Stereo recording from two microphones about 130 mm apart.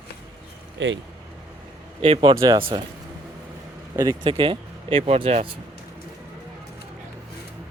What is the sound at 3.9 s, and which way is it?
Speech, 25° right (ahead or behind).